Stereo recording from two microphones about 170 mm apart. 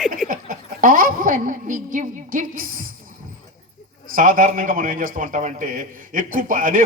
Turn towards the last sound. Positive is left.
turn(degrees=-50)  # may be behind; listen again after turning